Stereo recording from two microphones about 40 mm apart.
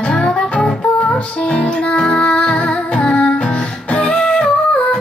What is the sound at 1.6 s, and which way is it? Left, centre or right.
Music, left.